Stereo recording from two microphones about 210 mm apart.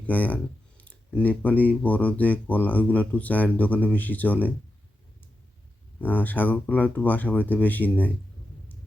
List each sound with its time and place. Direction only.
0.0 s speech: 5° left (ahead or behind)
6.0 s speech: 10° left (ahead or behind)